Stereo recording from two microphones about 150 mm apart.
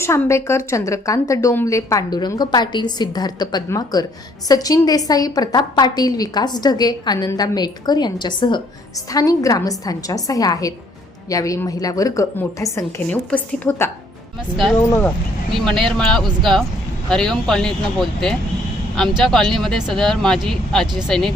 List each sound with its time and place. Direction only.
0.0 s a woman's voice: 20° left (ahead or behind)
12.7 s a woman's voice: 10° left (ahead or behind)
14.5 s speech: centre (ahead or behind)
14.8 s a woman's voice: 20° left (ahead or behind)
15.6 s speech: 5° left (ahead or behind)